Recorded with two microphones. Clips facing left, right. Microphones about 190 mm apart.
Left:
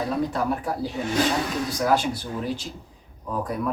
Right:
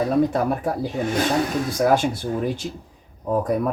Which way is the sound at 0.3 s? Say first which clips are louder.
Right 4 dB; 50° right (ahead or behind).